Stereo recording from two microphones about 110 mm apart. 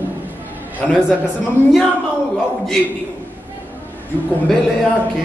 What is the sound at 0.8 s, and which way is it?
Speech, 5° left (ahead or behind).